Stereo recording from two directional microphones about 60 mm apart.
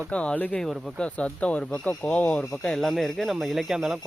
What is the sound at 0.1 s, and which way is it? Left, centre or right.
Speech, centre.